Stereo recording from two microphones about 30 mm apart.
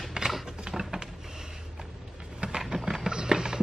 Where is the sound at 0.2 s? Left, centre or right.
Right.